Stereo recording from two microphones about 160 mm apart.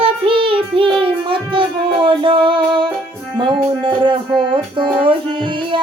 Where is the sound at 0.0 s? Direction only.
35° right (ahead or behind).